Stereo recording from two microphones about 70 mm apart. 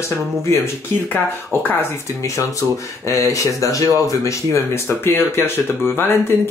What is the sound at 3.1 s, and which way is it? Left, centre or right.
Speech, left.